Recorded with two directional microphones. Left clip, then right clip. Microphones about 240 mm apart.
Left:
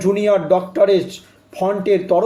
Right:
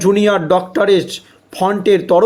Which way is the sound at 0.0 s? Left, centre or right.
Right.